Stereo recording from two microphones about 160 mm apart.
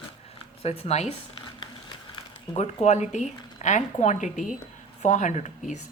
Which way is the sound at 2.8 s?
45° left (ahead or behind).